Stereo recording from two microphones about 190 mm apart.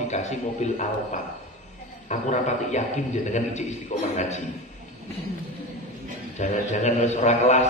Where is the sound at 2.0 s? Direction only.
40° left (ahead or behind).